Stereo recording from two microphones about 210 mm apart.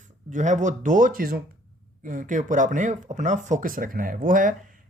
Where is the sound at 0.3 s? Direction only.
35° right (ahead or behind).